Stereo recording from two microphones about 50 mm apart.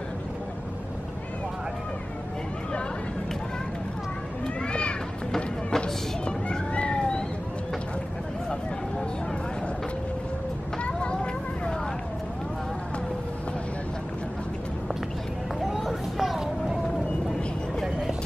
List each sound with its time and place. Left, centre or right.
4.6 s run: left
5.3 s music: centre
6.2 s cat: left
10.8 s vehicle: centre
15.6 s vehicle: centre